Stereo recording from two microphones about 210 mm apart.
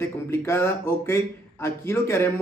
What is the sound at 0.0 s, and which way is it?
A man's voice, 10° left (ahead or behind).